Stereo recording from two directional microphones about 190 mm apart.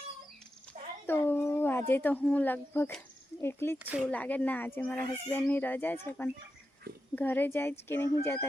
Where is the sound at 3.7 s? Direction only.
10° right (ahead or behind).